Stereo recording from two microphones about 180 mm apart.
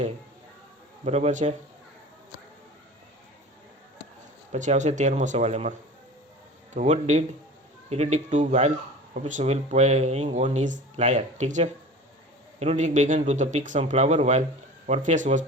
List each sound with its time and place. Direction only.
1.0 s speech: 35° right (ahead or behind)
4.5 s speech: 40° right (ahead or behind)
6.7 s speech: 40° right (ahead or behind)